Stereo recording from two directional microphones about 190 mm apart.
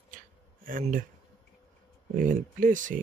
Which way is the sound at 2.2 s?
45° right (ahead or behind).